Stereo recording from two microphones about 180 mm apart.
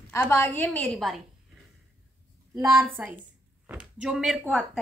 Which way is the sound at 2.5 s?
20° right (ahead or behind).